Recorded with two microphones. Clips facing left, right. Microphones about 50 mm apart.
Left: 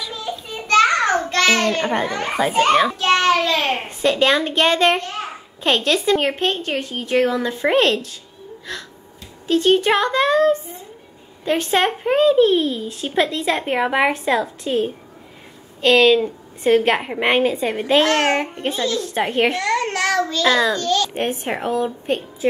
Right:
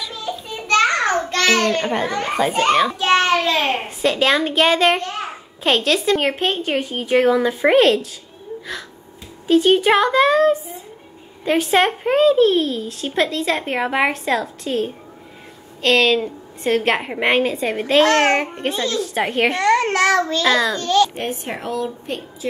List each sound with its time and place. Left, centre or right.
0.0 s a sound: centre
3.2 s a child's voice: centre
3.8 s a woman's voice: centre
9.5 s a woman's voice: centre
20.8 s a child's voice: centre
21.1 s a woman's voice: left